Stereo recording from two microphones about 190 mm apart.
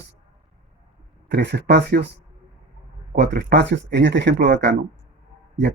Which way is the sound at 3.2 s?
60° right (ahead or behind).